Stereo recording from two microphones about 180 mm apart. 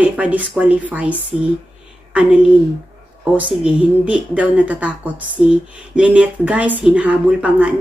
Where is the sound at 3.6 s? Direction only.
5° right (ahead or behind).